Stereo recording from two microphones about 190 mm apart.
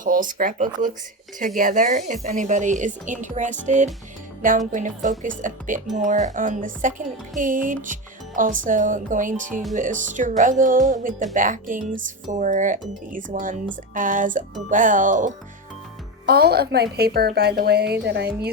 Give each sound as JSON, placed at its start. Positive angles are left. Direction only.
{"t": 0.0, "sound": "speech", "side_deg": -45}
{"t": 16.2, "sound": "a woman's voice", "side_deg": -55}